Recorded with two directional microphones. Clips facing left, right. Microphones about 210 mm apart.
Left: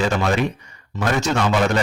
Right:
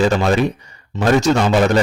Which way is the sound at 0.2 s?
35° right (ahead or behind).